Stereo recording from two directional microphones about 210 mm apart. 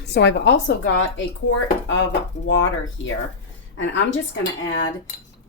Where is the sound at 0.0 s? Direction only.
55° left (ahead or behind).